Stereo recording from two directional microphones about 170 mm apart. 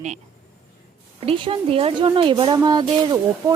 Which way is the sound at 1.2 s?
35° right (ahead or behind).